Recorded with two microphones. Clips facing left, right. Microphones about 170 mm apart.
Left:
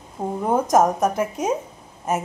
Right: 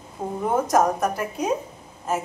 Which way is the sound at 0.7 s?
20° left (ahead or behind).